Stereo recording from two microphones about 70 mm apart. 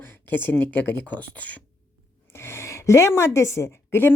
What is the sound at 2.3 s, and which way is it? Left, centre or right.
A woman's voice, left.